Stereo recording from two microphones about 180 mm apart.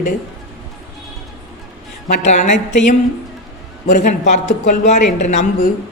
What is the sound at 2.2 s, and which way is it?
Speech, 40° left (ahead or behind).